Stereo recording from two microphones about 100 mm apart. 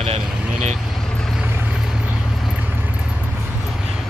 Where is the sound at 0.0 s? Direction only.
80° right.